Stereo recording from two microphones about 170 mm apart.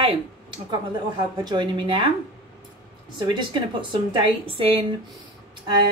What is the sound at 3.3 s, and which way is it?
Speech, 30° right (ahead or behind).